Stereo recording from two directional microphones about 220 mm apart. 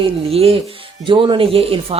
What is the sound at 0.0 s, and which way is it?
Speech, 25° right (ahead or behind).